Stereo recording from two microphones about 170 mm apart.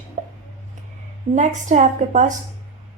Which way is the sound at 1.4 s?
45° right (ahead or behind).